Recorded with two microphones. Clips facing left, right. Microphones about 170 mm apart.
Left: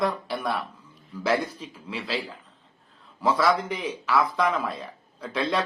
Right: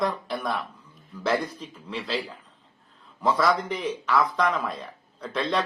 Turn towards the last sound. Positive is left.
turn(degrees=10)  # may be behind; listen again after turning